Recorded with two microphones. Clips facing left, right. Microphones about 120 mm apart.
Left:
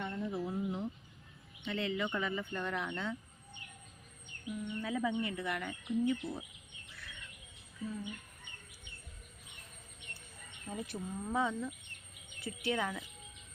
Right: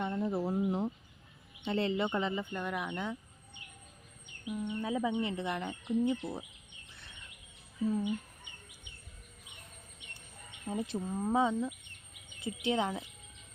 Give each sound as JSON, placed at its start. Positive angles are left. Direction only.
{"t": 0.0, "sound": "a sound", "side_deg": -40}
{"t": 1.6, "sound": "speech", "side_deg": -35}
{"t": 4.5, "sound": "speech", "side_deg": -25}
{"t": 6.9, "sound": "bird vocalization", "side_deg": -25}
{"t": 10.7, "sound": "speech", "side_deg": -25}